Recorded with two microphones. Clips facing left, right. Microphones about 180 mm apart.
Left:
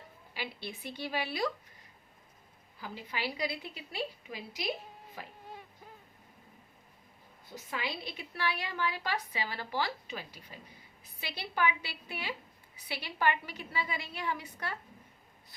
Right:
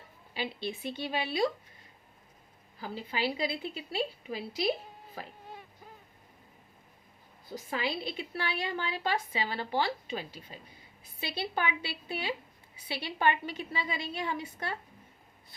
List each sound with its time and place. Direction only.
0.3 s a woman's voice: 25° right (ahead or behind)
2.8 s a woman's voice: 30° right (ahead or behind)
7.5 s a woman's voice: 30° right (ahead or behind)